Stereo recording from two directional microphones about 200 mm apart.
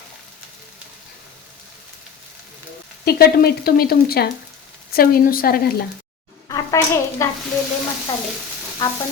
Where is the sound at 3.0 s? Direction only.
50° left (ahead or behind).